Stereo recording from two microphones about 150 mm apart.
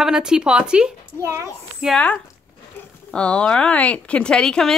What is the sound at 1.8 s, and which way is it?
Speech, 5° left (ahead or behind).